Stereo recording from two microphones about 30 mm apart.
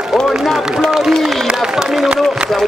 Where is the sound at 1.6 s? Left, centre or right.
Centre.